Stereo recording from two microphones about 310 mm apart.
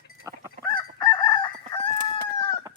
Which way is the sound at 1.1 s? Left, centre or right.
Centre.